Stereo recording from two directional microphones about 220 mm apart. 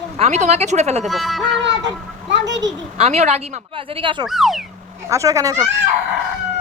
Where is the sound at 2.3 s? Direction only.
55° right (ahead or behind).